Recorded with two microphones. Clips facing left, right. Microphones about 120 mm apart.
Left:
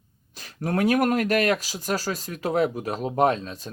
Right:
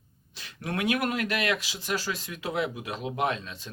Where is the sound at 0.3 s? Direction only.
40° left (ahead or behind).